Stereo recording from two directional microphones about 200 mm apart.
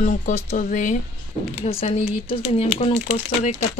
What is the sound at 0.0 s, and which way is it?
Speech, 40° left (ahead or behind).